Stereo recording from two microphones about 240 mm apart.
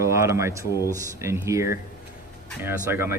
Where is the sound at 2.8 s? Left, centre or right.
Centre.